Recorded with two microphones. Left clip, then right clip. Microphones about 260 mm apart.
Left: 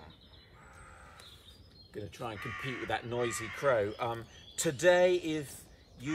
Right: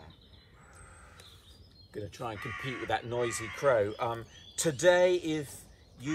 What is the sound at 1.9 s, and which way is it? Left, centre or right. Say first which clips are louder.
Speech: right 2 dB; centre.